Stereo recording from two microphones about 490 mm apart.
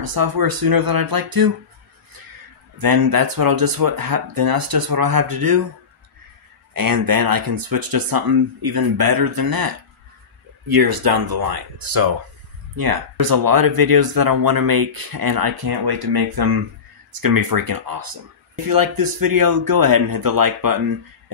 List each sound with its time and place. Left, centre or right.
0.0 s speech: right
2.8 s speech: right
6.7 s speech: right
10.7 s speech: right